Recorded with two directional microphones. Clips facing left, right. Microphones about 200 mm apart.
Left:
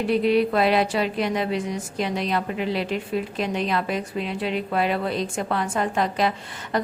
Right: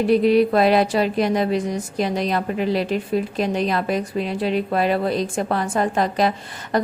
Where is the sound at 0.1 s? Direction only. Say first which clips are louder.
Right 4 dB; 40° right (ahead or behind).